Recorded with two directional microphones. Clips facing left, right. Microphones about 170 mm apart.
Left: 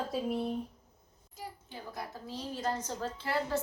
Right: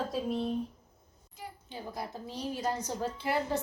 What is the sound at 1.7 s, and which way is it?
A woman's voice, 20° right (ahead or behind).